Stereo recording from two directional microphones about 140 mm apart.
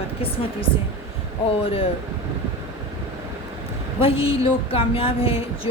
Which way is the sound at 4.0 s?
40° left (ahead or behind).